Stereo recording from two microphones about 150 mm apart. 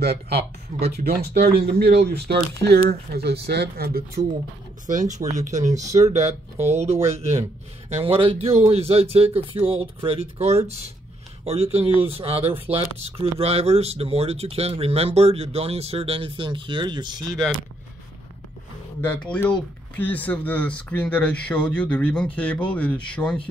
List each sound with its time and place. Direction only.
0.0 s speech: 90° right
4.8 s speech: 55° right (ahead or behind); by 17.2 s 30° right (ahead or behind)
18.9 s speech: 10° left (ahead or behind)